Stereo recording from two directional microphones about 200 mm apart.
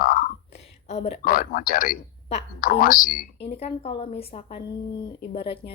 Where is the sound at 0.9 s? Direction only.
30° left (ahead or behind).